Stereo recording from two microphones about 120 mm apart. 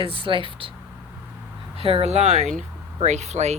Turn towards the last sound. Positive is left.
turn(degrees=-70)  # may be behind; listen again after turning